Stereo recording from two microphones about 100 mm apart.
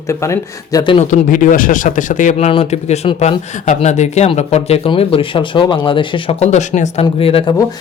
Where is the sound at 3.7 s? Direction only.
80° left.